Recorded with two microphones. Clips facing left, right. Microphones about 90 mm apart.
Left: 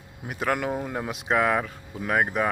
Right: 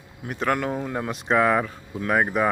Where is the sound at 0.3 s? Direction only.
5° left (ahead or behind).